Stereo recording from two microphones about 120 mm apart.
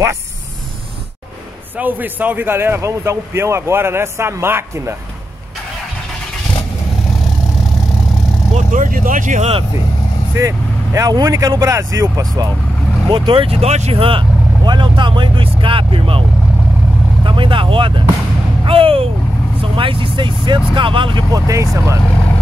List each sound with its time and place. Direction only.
1.8 s a man's voice: 15° right (ahead or behind)
8.5 s speech: 90° right
10.3 s a man's voice: 25° right (ahead or behind)
13.1 s speech: 45° right (ahead or behind)
21.5 s a man's voice: 25° right (ahead or behind)